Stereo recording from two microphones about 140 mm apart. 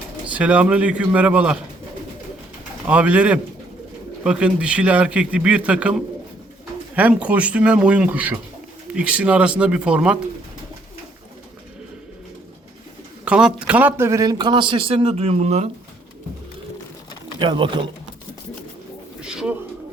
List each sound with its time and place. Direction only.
0.3 s a man's voice: 10° right (ahead or behind)
2.8 s a man's voice: 10° right (ahead or behind)
13.2 s a man's voice: 5° right (ahead or behind); by 15.6 s 50° right (ahead or behind)
17.4 s a man's voice: 35° right (ahead or behind)
19.2 s bird: 5° right (ahead or behind)